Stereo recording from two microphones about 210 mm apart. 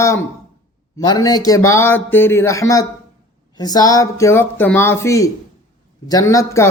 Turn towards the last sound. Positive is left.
turn(degrees=15)  # may be behind; listen again after turning